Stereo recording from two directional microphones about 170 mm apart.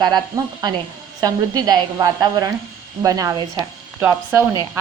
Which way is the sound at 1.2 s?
25° right (ahead or behind).